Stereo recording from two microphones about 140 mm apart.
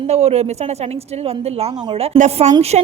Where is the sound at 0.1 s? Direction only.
50° right (ahead or behind).